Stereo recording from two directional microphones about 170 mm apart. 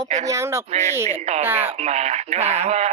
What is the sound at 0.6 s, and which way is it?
Speech, 40° right (ahead or behind).